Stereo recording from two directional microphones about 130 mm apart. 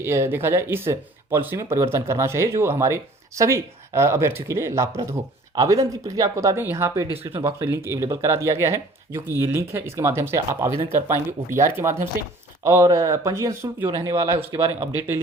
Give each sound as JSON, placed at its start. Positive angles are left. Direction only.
{"t": 0.0, "sound": "speech", "side_deg": -20}